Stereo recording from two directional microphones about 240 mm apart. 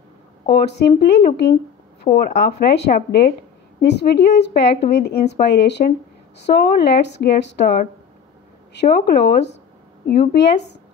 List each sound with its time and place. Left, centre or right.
0.5 s a woman's voice: left